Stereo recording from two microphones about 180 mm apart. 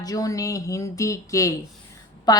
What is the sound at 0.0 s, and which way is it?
Speech, 20° left (ahead or behind).